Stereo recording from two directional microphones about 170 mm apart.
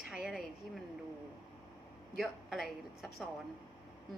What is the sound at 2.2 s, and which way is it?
A woman's voice, centre (ahead or behind).